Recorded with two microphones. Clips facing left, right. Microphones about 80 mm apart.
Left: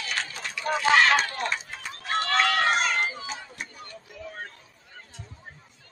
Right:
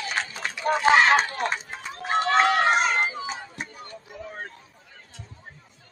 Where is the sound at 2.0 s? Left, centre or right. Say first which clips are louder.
Right 4 dB; centre.